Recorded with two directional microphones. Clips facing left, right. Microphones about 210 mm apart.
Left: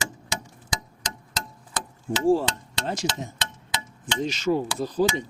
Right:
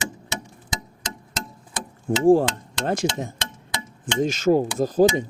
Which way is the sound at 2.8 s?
55° right (ahead or behind).